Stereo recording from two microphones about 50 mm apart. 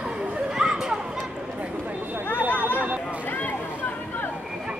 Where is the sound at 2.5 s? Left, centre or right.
Left.